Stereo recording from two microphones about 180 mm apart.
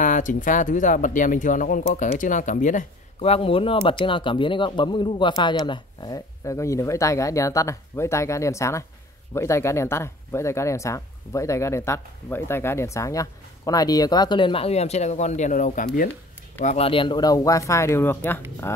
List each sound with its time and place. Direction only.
0.0 s speech: 45° left (ahead or behind)
16.6 s speech: 35° left (ahead or behind); by 18.4 s 10° left (ahead or behind)